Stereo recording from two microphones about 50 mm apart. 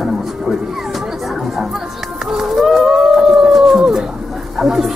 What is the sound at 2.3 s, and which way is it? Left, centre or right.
Dog, centre.